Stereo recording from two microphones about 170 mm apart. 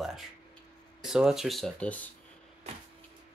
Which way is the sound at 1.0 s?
5° right (ahead or behind).